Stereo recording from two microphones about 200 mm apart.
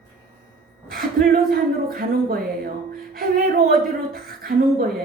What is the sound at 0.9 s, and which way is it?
Speech, 45° right (ahead or behind).